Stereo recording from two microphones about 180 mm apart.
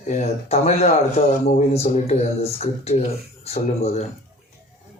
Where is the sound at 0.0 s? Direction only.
35° left (ahead or behind).